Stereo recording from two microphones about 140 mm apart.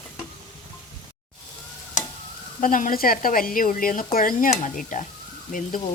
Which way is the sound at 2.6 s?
70° left (ahead or behind).